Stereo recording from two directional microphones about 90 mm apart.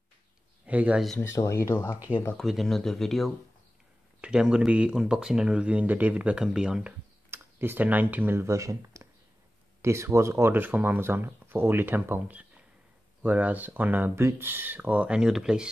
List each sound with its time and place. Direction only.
0.7 s speech: 15° right (ahead or behind)
1.2 s speech: 30° left (ahead or behind)
2.3 s speech: centre (ahead or behind)
4.2 s speech: 10° right (ahead or behind)
7.2 s speech: 25° right (ahead or behind); by 15.7 s 10° right (ahead or behind)